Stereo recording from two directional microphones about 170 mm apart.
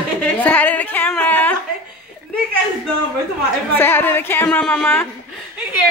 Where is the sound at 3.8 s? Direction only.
15° left (ahead or behind).